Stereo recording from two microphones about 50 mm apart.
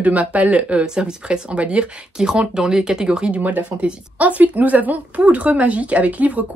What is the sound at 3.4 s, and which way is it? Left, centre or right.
Speech, right.